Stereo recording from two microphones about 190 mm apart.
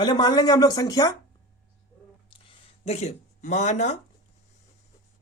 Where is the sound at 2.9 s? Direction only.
35° left (ahead or behind).